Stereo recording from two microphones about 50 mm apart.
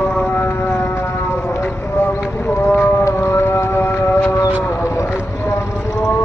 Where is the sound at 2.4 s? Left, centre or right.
Left.